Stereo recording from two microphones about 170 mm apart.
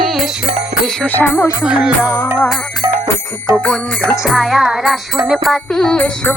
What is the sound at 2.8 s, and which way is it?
Music, 25° right (ahead or behind).